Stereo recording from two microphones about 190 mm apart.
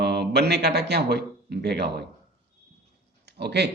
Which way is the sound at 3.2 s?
60° right (ahead or behind).